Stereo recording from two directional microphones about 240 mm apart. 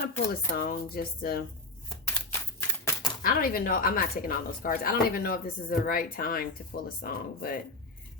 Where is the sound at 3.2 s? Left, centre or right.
Left.